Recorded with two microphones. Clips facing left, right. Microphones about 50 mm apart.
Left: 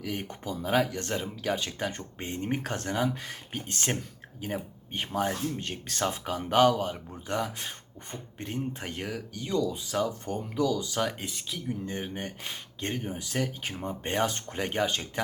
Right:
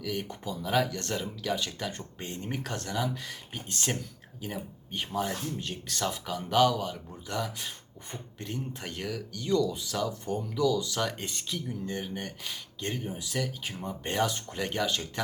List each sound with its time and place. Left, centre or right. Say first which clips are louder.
0.0 s speech: right 1 dB; left
0.3 s speech: left 1 dB; left
0.6 s speech: left 1 dB; left
10.5 s speech: right 1 dB; left
10.9 s speech: left 1 dB; centre
11.7 s speech: left 4 dB; left